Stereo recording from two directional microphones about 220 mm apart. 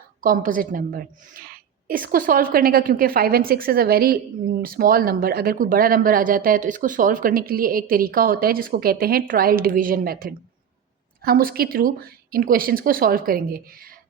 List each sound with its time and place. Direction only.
0.2 s speech: 40° right (ahead or behind)